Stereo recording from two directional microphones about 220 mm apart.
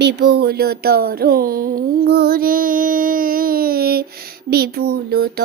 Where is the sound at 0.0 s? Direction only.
50° right (ahead or behind).